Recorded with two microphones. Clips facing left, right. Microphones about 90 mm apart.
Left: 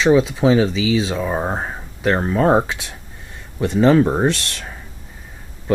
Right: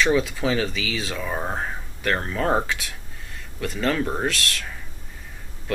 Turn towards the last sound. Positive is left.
turn(degrees=25)  # may be behind; listen again after turning